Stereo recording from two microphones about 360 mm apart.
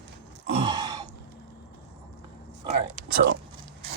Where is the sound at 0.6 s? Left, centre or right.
Centre.